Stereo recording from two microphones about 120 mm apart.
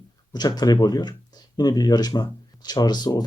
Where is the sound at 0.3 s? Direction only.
35° left (ahead or behind).